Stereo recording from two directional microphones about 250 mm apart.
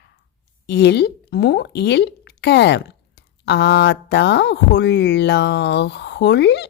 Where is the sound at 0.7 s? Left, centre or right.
Left.